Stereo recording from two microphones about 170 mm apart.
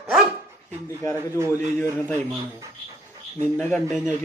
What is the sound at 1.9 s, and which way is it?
Speech, 10° left (ahead or behind).